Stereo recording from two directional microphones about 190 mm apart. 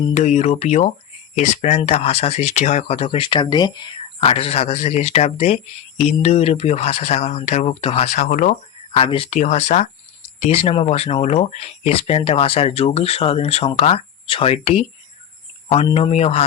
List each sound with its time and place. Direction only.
0.1 s speech: 40° left (ahead or behind)